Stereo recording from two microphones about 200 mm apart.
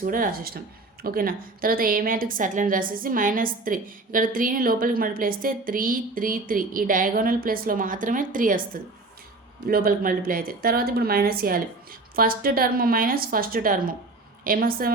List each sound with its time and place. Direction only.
0.0 s a woman's voice: 45° right (ahead or behind)